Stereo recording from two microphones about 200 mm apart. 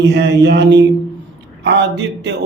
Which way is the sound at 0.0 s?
60° right (ahead or behind).